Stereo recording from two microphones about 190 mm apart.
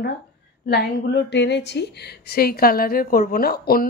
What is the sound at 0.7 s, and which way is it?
A woman's voice, 60° left (ahead or behind).